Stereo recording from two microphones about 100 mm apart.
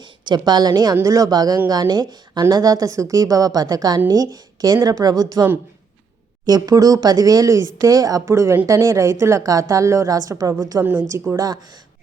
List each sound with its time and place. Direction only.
0.3 s a woman's voice: 45° right (ahead or behind)
10.8 s a woman's voice: 20° right (ahead or behind)
11.3 s speech: 40° right (ahead or behind)